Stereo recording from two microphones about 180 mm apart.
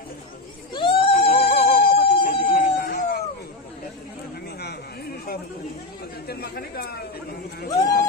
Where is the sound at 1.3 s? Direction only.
60° left (ahead or behind).